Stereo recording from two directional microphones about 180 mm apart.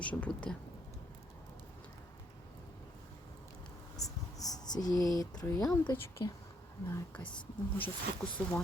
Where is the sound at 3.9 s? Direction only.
20° left (ahead or behind).